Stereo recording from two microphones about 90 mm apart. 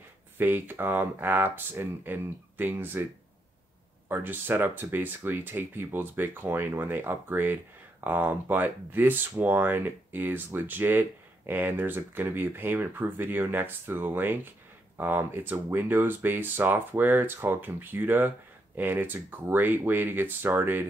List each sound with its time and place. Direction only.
0.4 s speech: 20° right (ahead or behind)
4.1 s speech: 20° right (ahead or behind)